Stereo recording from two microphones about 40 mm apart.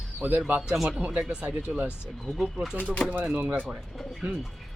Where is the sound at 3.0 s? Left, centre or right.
Centre.